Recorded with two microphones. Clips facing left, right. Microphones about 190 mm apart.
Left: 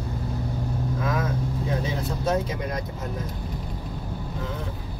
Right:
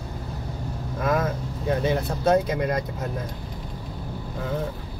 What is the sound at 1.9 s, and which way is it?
Speech, 60° right (ahead or behind).